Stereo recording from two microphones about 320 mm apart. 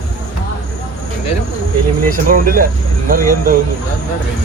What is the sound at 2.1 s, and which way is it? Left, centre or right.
Speech, right.